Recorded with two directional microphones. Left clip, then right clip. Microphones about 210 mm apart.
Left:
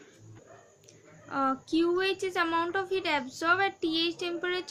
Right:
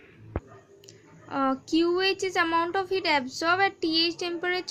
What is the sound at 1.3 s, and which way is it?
Speech, 25° right (ahead or behind).